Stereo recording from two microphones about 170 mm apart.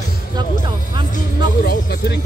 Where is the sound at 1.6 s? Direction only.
60° left (ahead or behind).